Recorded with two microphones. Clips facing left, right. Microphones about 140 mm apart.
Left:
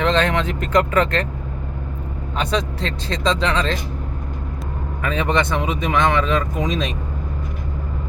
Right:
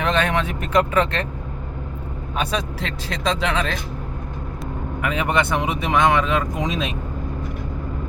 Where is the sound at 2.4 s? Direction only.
10° right (ahead or behind).